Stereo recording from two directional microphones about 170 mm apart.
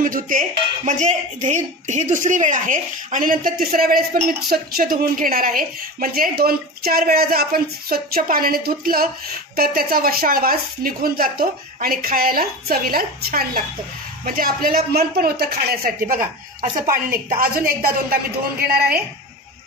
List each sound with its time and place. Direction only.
0.0 s speech: 50° right (ahead or behind)